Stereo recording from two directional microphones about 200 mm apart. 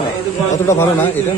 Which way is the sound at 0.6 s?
10° left (ahead or behind).